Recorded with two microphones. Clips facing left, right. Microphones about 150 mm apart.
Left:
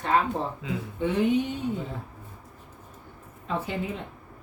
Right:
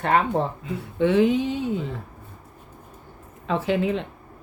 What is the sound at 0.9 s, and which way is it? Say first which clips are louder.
Speech: right 5 dB; 90° right.